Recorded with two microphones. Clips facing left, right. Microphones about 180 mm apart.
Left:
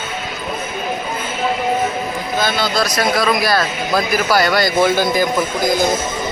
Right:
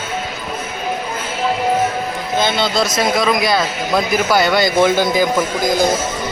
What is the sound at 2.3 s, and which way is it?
A man's voice, 25° right (ahead or behind).